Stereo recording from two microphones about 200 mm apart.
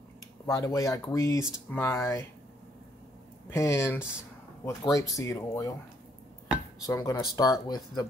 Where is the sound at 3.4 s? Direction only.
15° left (ahead or behind).